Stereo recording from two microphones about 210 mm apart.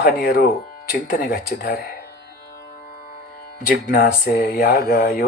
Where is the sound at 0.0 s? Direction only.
45° left (ahead or behind).